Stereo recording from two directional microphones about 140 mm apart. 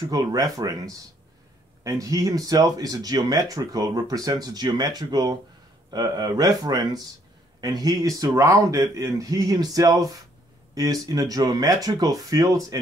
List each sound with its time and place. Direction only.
0.0 s speech: 25° right (ahead or behind)